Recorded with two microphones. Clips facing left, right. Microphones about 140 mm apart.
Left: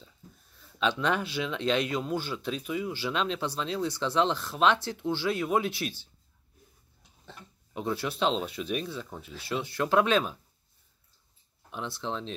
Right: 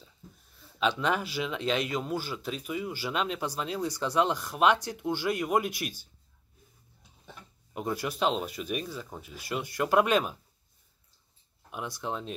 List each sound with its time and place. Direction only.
0.7 s speech: 5° right (ahead or behind)
7.2 s speech: 15° right (ahead or behind)
11.7 s speech: 10° right (ahead or behind)